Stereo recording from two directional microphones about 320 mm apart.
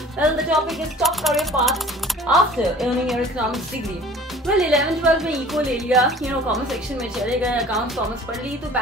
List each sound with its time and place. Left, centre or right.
0.2 s a woman's voice: centre